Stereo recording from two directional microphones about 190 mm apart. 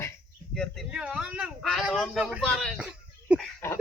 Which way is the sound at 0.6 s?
Centre (ahead or behind).